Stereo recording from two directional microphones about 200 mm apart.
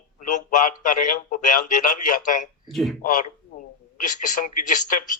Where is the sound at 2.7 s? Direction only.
Centre (ahead or behind).